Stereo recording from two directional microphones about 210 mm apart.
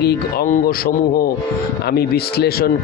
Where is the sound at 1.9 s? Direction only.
50° left (ahead or behind).